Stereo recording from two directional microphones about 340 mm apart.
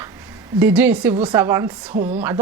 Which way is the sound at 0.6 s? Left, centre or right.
Centre.